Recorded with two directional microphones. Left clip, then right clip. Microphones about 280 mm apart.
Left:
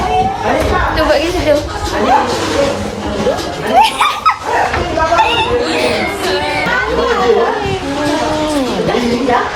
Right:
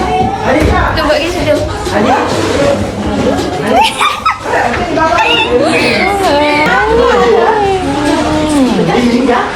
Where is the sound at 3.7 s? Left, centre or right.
Left.